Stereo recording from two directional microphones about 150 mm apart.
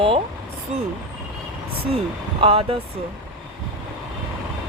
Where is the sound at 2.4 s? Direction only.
35° right (ahead or behind).